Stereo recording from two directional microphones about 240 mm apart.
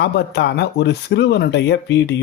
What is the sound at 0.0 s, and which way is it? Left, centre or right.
Speech, left.